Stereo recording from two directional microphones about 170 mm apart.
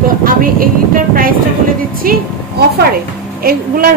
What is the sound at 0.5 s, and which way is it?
A woman's voice, 55° right (ahead or behind).